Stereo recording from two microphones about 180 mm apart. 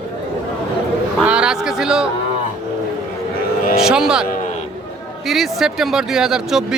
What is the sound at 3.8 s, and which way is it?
Speech, 5° right (ahead or behind).